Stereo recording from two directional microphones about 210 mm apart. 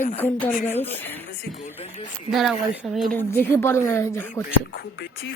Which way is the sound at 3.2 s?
10° left (ahead or behind).